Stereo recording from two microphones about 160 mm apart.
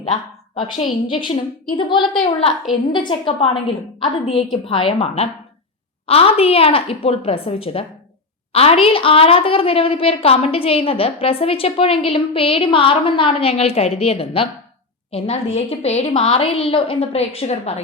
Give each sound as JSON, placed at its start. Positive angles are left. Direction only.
{"t": 0.8, "sound": "a woman's voice", "side_deg": 30}